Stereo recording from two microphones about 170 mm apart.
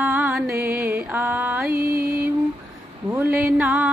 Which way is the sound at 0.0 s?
5° right (ahead or behind).